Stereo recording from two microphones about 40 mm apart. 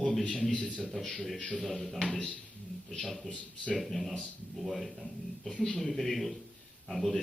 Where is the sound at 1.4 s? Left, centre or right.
Left.